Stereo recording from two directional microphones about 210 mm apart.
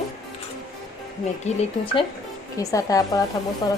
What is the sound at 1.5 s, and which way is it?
A woman's voice, 25° left (ahead or behind).